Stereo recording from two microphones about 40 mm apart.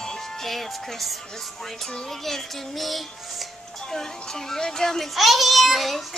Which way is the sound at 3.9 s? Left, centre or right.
Centre.